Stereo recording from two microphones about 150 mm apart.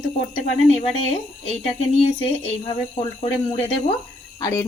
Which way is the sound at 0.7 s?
45° left (ahead or behind).